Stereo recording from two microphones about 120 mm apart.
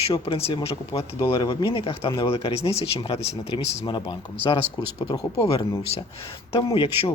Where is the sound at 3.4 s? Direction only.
65° left (ahead or behind).